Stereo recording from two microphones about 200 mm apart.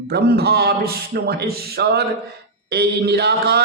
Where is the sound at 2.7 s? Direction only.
55° right (ahead or behind).